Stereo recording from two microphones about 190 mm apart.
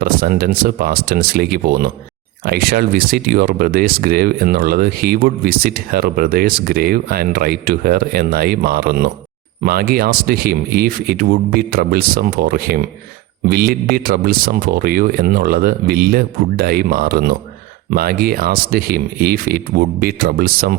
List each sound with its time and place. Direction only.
0.0 s speech: 50° right (ahead or behind)